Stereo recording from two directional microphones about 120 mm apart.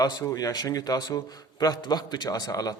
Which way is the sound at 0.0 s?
30° left (ahead or behind).